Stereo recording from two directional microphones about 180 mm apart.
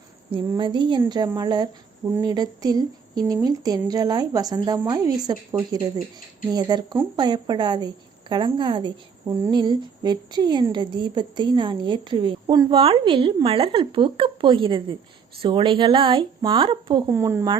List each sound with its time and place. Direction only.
0.3 s a woman's voice: 30° right (ahead or behind)
17.1 s speech: 15° right (ahead or behind)